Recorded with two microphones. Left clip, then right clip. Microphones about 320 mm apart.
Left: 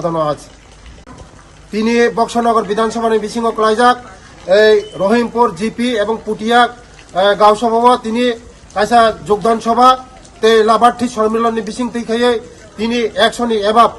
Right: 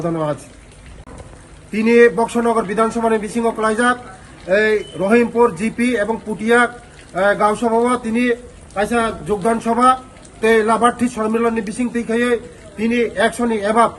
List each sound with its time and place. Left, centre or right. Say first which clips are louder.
0.0 s a man's voice: left 5 dB; centre
1.7 s a man's voice: right 1 dB; centre